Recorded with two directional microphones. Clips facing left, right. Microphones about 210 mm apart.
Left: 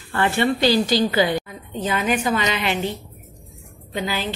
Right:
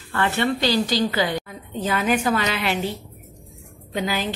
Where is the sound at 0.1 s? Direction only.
20° left (ahead or behind).